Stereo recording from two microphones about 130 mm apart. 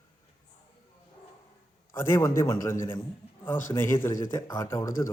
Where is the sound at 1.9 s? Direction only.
20° left (ahead or behind).